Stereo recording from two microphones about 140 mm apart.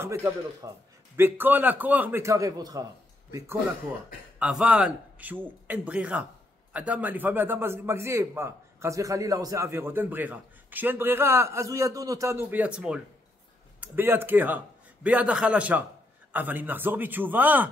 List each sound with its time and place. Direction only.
0.0 s a man's voice: 20° right (ahead or behind)
4.4 s a man's voice: 5° right (ahead or behind)